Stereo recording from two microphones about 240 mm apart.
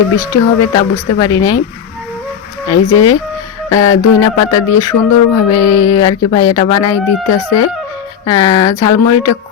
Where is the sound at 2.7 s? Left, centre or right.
Centre.